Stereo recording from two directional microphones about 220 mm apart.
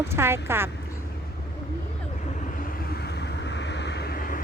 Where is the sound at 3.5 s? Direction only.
50° left (ahead or behind).